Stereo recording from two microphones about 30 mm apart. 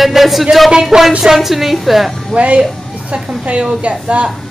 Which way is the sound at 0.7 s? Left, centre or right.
Centre.